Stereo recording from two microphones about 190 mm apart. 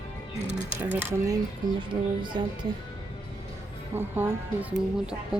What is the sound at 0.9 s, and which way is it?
Speech, 15° right (ahead or behind).